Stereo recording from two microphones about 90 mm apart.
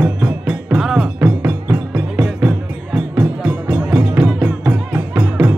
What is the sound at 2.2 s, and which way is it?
Music, 5° right (ahead or behind).